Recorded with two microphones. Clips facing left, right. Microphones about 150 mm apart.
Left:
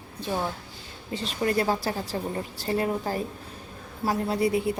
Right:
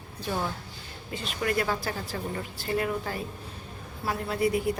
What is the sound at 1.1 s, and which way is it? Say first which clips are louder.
A woman's voice: left 3 dB; 30° left (ahead or behind).